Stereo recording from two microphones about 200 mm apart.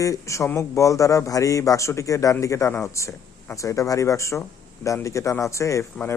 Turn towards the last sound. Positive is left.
turn(degrees=15)  # may be behind; listen again after turning